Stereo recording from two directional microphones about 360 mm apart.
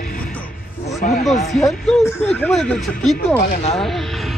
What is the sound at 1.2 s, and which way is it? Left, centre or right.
A man's voice, centre.